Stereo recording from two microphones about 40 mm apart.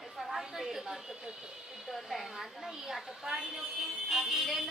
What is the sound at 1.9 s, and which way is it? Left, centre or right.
A woman's voice, centre.